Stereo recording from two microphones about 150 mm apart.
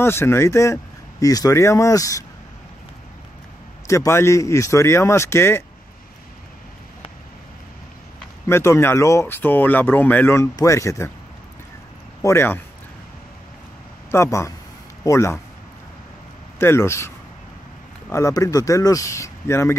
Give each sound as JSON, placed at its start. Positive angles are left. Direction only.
{"t": 0.0, "sound": "speech", "side_deg": 15}
{"t": 3.8, "sound": "speech", "side_deg": 20}
{"t": 8.5, "sound": "speech", "side_deg": 20}
{"t": 12.2, "sound": "speech", "side_deg": 20}
{"t": 14.1, "sound": "speech", "side_deg": 20}
{"t": 16.5, "sound": "speech", "side_deg": 15}
{"t": 18.1, "sound": "speech", "side_deg": 20}